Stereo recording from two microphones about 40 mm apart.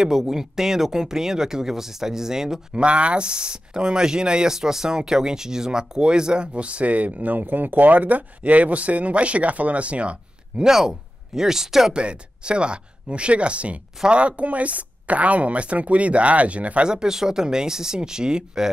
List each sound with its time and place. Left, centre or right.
0.0 s speech: centre
2.7 s speech: right
10.6 s speech: centre
11.9 s speech: right
16.9 s speech: centre